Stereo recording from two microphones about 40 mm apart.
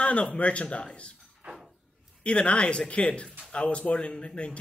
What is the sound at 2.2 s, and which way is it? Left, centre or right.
Speech, left.